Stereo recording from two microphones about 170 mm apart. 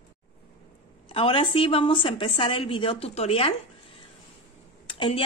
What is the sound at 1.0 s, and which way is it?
Speech, 30° left (ahead or behind).